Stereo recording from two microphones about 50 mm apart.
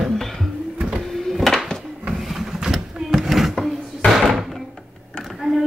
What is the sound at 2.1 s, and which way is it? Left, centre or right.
Printer, centre.